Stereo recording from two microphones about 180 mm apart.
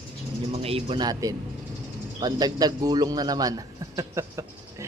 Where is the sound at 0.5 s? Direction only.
30° right (ahead or behind).